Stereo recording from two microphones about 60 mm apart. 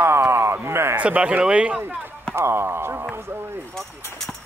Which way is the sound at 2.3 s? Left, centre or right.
Right.